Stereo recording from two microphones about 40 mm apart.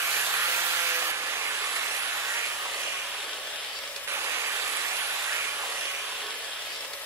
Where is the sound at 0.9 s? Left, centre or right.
Right.